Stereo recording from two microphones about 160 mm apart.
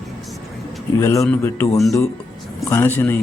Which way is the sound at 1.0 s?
20° left (ahead or behind).